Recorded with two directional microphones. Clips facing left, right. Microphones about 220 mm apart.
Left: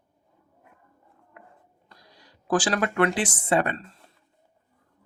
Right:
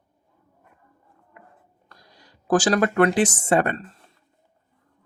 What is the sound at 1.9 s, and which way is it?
Speech, 50° right (ahead or behind).